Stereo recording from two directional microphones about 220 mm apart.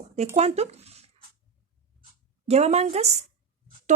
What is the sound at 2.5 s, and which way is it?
Speech, 30° right (ahead or behind).